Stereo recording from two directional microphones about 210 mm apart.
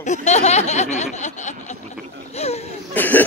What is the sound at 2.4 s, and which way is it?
Whimper, 30° left (ahead or behind).